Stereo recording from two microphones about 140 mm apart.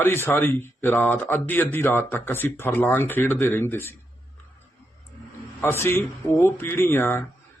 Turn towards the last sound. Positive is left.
turn(degrees=15)  # may be behind; listen again after turning